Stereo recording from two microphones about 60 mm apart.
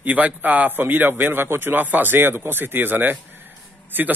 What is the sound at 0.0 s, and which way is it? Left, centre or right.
Speech, right.